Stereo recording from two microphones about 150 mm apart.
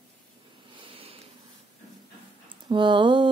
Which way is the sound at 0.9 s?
40° right (ahead or behind).